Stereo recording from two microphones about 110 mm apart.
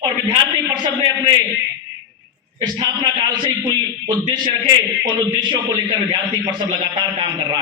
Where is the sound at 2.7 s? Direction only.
45° right (ahead or behind).